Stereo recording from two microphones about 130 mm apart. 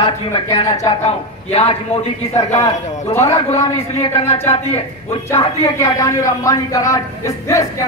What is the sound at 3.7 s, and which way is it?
Speech, 50° left (ahead or behind).